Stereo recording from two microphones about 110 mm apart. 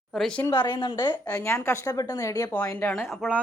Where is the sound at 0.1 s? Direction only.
Centre (ahead or behind).